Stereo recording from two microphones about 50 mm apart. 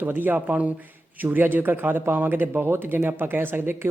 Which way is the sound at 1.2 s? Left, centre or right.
Right.